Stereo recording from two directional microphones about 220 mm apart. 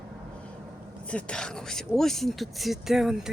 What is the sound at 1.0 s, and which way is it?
Speech, 5° left (ahead or behind).